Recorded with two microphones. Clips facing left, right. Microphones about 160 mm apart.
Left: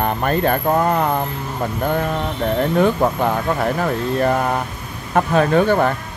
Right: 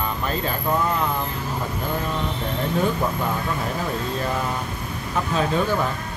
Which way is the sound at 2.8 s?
65° left (ahead or behind).